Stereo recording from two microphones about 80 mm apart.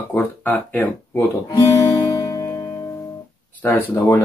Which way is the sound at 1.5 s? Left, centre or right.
Left.